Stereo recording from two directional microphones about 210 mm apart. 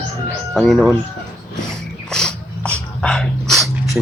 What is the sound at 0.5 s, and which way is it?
Speech, centre (ahead or behind).